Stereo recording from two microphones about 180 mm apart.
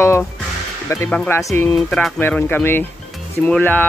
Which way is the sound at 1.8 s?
5° left (ahead or behind).